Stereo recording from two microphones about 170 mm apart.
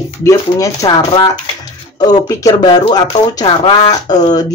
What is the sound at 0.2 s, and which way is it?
Speech, 20° left (ahead or behind).